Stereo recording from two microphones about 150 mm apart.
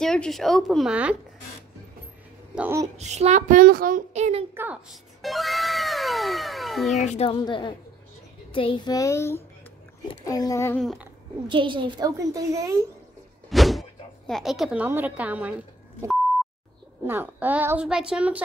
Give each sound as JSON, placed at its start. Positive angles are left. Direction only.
{"t": 0.0, "sound": "speech", "side_deg": 5}
{"t": 2.5, "sound": "speech", "side_deg": -10}
{"t": 3.0, "sound": "speech", "side_deg": -50}
{"t": 4.1, "sound": "a woman's voice", "side_deg": -45}
{"t": 5.2, "sound": "speech", "side_deg": 0}
{"t": 7.1, "sound": "speech", "side_deg": 40}
{"t": 8.9, "sound": "speech", "side_deg": 20}
{"t": 11.4, "sound": "a child's voice", "side_deg": -35}
{"t": 13.5, "sound": "a sound", "side_deg": 0}
{"t": 14.9, "sound": "a woman's voice", "side_deg": -10}
{"t": 17.0, "sound": "a woman's voice", "side_deg": -15}